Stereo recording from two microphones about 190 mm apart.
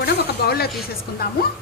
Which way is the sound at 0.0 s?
55° left (ahead or behind).